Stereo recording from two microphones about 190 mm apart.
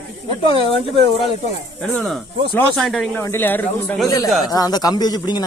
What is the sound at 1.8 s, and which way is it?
Speech, 5° left (ahead or behind).